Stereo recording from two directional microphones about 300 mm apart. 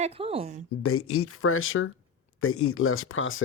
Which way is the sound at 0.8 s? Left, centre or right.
Left.